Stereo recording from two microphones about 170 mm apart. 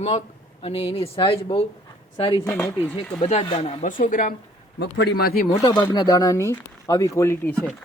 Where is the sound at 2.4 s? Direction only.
15° left (ahead or behind).